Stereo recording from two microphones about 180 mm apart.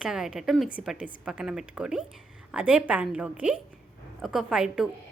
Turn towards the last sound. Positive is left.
turn(degrees=-5)  # may be behind; listen again after turning